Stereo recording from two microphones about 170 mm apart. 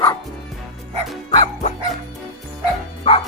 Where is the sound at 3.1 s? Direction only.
35° left (ahead or behind).